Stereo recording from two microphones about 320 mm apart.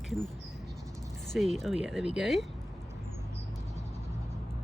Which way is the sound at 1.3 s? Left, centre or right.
Centre.